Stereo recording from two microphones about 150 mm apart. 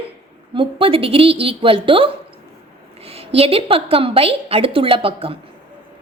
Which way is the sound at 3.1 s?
40° right (ahead or behind).